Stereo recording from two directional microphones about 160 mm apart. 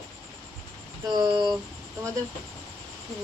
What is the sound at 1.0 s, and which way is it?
Speech, 25° right (ahead or behind).